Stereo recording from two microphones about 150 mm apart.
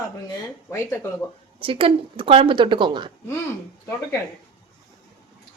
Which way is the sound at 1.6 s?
35° right (ahead or behind).